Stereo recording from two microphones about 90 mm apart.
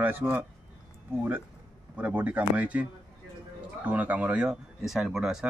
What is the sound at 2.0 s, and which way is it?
Speech, 15° right (ahead or behind).